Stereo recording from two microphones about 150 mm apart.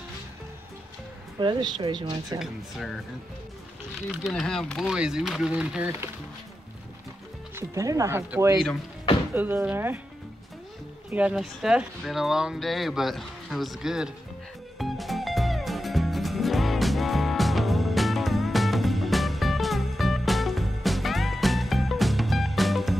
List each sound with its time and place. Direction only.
1.4 s speech: 30° right (ahead or behind)
2.3 s speech: centre (ahead or behind)
4.2 s speech: centre (ahead or behind)
7.5 s speech: 20° right (ahead or behind)
11.1 s speech: 10° right (ahead or behind)
14.8 s music: centre (ahead or behind)